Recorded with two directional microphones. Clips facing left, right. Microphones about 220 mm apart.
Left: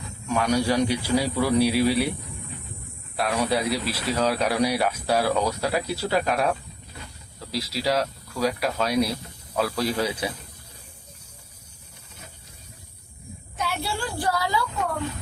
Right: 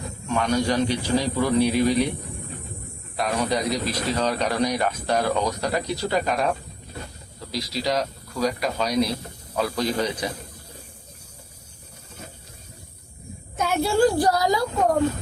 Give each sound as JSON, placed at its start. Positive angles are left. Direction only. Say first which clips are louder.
{"t": 0.3, "sound": "speech", "louder": "even", "side_deg": 10}
{"t": 3.2, "sound": "speech", "louder": "even", "side_deg": 5}
{"t": 13.6, "sound": "a woman's voice", "louder": "right 10 dB", "side_deg": -45}